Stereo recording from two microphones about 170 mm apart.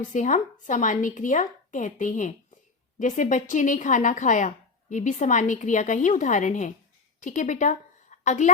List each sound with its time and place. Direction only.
0.1 s a woman's voice: 45° left (ahead or behind)